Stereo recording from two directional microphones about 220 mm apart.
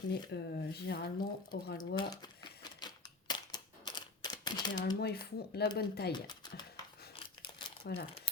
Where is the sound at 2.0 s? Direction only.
20° left (ahead or behind).